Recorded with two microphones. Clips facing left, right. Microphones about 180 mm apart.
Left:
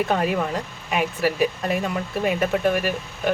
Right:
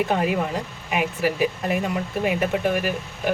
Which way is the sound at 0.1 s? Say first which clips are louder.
Even; 15° right (ahead or behind).